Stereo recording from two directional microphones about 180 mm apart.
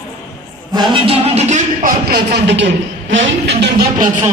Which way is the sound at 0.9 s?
35° right (ahead or behind).